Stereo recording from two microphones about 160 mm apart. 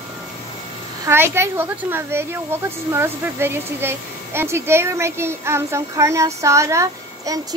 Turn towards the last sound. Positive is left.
turn(degrees=-20)  # may be behind; listen again after turning